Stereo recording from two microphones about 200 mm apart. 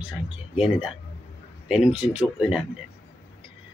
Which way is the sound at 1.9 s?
35° right (ahead or behind).